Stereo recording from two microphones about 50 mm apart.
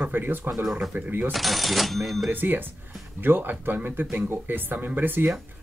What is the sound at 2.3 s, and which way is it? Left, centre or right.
Speech, right.